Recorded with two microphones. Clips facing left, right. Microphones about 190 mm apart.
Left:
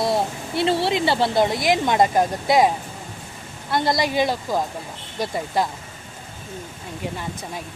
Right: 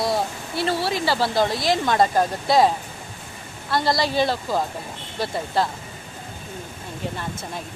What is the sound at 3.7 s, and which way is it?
Speech, 20° left (ahead or behind).